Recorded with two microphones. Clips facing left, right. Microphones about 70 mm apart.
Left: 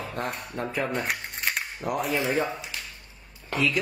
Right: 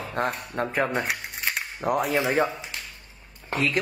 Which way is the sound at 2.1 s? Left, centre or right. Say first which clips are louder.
Right 2 dB; right.